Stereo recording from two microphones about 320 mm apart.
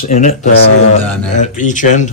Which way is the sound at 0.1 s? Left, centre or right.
Left.